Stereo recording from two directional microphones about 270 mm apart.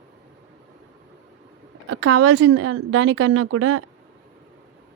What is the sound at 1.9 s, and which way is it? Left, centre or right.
Speech, right.